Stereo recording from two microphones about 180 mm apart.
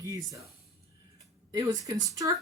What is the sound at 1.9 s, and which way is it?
Speech, 20° right (ahead or behind).